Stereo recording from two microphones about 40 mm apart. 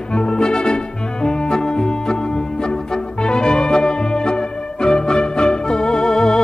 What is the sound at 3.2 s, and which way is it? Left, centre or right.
Music, centre.